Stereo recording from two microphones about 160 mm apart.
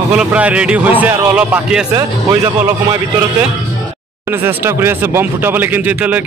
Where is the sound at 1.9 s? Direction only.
20° right (ahead or behind).